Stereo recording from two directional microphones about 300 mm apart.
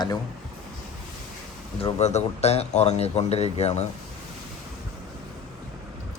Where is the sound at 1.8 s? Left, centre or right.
Left.